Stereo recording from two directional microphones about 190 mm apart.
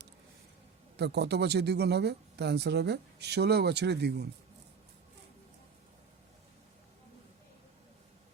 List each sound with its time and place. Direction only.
0.9 s speech: 60° right (ahead or behind)